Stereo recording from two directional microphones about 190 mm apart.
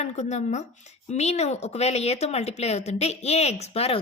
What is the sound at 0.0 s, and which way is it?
Speech, 35° left (ahead or behind).